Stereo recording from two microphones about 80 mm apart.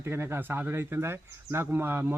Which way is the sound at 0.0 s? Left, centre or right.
Right.